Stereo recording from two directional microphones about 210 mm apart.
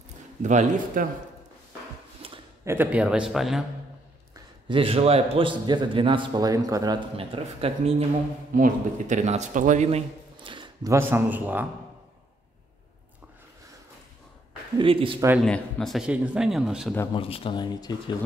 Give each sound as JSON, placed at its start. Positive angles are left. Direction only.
{"t": 0.4, "sound": "a man's voice", "side_deg": -35}
{"t": 2.2, "sound": "a sound", "side_deg": -25}
{"t": 2.6, "sound": "speech", "side_deg": -10}
{"t": 4.6, "sound": "a man's voice", "side_deg": -25}
{"t": 8.5, "sound": "a man's voice", "side_deg": -40}
{"t": 14.8, "sound": "a man's voice", "side_deg": -25}
{"t": 15.4, "sound": "speech", "side_deg": 5}
{"t": 17.1, "sound": "speech", "side_deg": 25}